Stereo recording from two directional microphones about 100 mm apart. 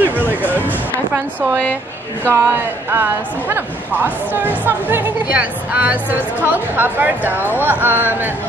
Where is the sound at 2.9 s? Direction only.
20° right (ahead or behind).